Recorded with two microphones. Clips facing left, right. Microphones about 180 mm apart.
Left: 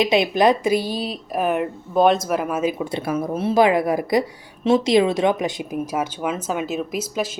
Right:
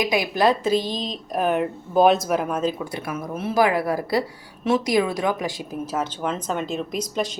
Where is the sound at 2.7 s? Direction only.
25° left (ahead or behind).